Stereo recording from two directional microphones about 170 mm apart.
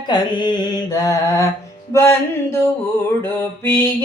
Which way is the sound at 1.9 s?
15° left (ahead or behind).